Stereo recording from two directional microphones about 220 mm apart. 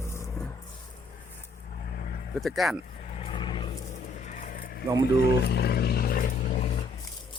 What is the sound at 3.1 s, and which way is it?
Vehicle, 25° left (ahead or behind).